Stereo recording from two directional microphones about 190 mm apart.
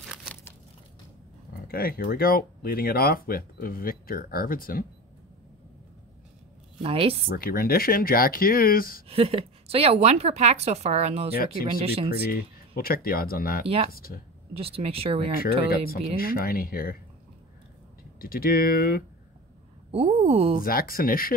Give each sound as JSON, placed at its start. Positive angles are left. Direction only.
{"t": 0.1, "sound": "crumpling", "side_deg": 0}
{"t": 1.7, "sound": "speech", "side_deg": 50}
{"t": 6.8, "sound": "a woman's voice", "side_deg": -30}
{"t": 7.2, "sound": "speech", "side_deg": 50}
{"t": 9.0, "sound": "a woman's voice", "side_deg": -30}
{"t": 11.3, "sound": "speech", "side_deg": 50}
{"t": 11.6, "sound": "a woman's voice", "side_deg": -30}
{"t": 12.1, "sound": "speech", "side_deg": 50}
{"t": 14.5, "sound": "a woman's voice", "side_deg": -30}
{"t": 16.2, "sound": "speech", "side_deg": 50}
{"t": 18.2, "sound": "speech", "side_deg": 50}
{"t": 19.9, "sound": "a woman's voice", "side_deg": -30}
{"t": 20.6, "sound": "speech", "side_deg": 50}